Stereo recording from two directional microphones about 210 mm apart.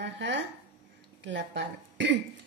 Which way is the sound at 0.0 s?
55° right (ahead or behind).